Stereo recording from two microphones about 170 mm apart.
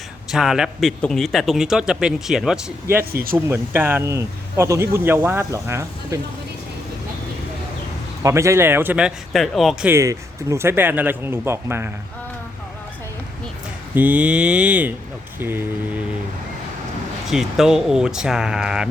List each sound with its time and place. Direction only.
0.3 s a man's voice: centre (ahead or behind)
3.1 s speech: 60° right (ahead or behind)
3.3 s speech: 10° right (ahead or behind)
8.2 s speech: 15° right (ahead or behind); by 9.9 s centre (ahead or behind)
9.9 s speech: 15° right (ahead or behind)
13.9 s speech: 10° right (ahead or behind)
17.2 s a man's voice: centre (ahead or behind)